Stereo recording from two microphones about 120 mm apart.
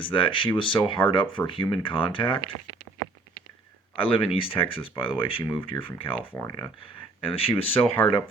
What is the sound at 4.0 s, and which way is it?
Speech, 50° left (ahead or behind).